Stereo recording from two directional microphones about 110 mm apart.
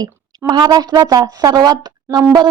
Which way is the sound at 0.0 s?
40° right (ahead or behind).